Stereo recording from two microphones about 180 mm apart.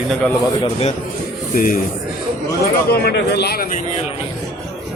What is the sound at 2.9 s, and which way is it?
Speech, 65° left (ahead or behind).